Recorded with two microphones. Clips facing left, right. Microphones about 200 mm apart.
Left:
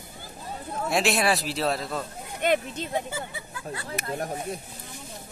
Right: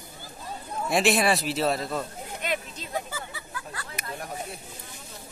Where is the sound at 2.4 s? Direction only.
55° left (ahead or behind).